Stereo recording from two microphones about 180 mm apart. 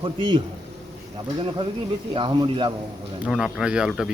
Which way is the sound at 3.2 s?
5° right (ahead or behind).